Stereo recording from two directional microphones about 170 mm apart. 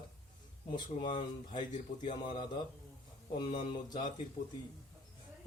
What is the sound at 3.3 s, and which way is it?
Speech, 30° left (ahead or behind).